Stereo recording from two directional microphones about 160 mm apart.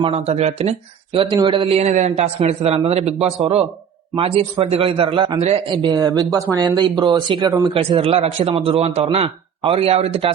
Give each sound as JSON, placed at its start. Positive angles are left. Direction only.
{"t": 0.0, "sound": "speech", "side_deg": -40}